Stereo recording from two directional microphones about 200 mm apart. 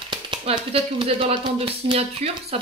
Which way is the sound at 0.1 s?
25° right (ahead or behind).